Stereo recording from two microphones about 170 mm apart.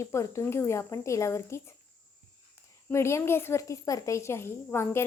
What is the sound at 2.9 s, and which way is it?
A woman's voice, 15° left (ahead or behind).